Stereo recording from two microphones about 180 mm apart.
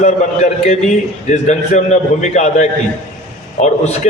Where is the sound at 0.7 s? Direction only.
40° left (ahead or behind).